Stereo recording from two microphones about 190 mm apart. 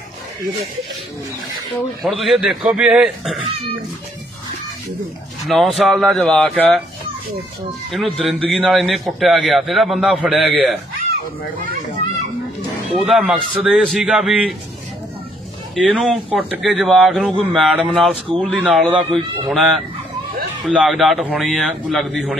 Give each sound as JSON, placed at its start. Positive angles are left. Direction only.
{"t": 2.0, "sound": "a man's voice", "side_deg": 0}
{"t": 5.4, "sound": "a man's voice", "side_deg": 0}
{"t": 7.9, "sound": "a man's voice", "side_deg": 0}
{"t": 12.9, "sound": "a man's voice", "side_deg": 0}
{"t": 15.7, "sound": "a man's voice", "side_deg": 0}
{"t": 19.0, "sound": "speech", "side_deg": -30}
{"t": 19.5, "sound": "a man's voice", "side_deg": 0}